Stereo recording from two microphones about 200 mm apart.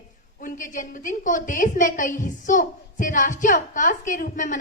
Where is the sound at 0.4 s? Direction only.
40° left (ahead or behind).